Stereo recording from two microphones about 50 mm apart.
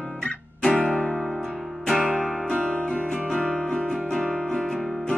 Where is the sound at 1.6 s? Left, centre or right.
Centre.